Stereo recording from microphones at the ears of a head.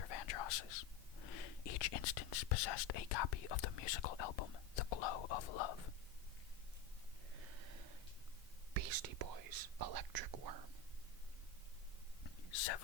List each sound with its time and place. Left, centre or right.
0.0 s whispering: left
7.3 s snort: right
8.7 s speech: right
12.2 s a sound: left